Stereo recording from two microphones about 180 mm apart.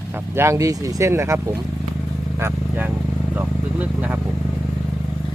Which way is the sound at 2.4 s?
10° right (ahead or behind).